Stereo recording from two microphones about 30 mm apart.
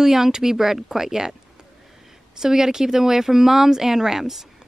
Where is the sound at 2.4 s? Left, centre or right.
Centre.